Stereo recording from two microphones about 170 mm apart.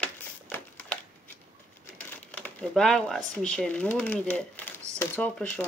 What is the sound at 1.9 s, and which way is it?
Crumpling, 10° left (ahead or behind).